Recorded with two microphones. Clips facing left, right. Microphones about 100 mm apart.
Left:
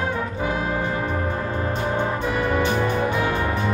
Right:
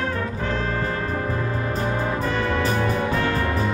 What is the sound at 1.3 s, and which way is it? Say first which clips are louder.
Music: even; 30° left (ahead or behind).